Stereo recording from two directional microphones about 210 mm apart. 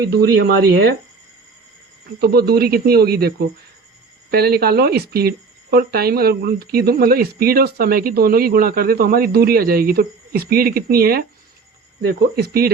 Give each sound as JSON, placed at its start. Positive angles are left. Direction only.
{"t": 0.1, "sound": "speech", "side_deg": -50}
{"t": 2.1, "sound": "speech", "side_deg": -50}
{"t": 12.4, "sound": "speech", "side_deg": -45}